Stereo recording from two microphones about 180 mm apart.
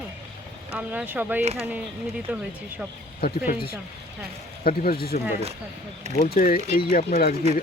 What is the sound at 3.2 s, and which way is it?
Speech, 55° left (ahead or behind).